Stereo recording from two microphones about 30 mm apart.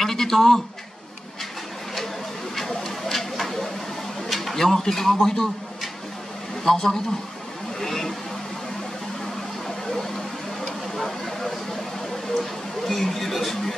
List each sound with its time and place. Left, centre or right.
0.0 s a sound: centre
2.5 s a sound: centre
4.6 s speech: centre
6.6 s speech: centre
7.8 s vehicle: centre
12.4 s a man's voice: centre